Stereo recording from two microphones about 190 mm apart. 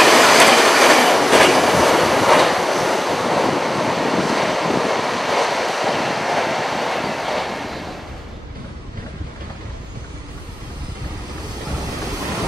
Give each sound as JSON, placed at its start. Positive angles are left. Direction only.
{"t": 0.0, "sound": "train", "side_deg": 0}